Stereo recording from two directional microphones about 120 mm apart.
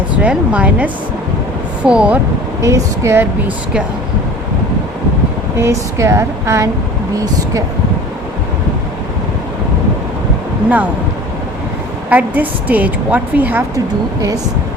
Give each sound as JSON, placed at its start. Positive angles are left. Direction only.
{"t": 0.2, "sound": "a woman's voice", "side_deg": -10}
{"t": 2.6, "sound": "speech", "side_deg": -25}
{"t": 5.5, "sound": "speech", "side_deg": -25}
{"t": 12.0, "sound": "a woman's voice", "side_deg": -15}
{"t": 13.7, "sound": "speech", "side_deg": -30}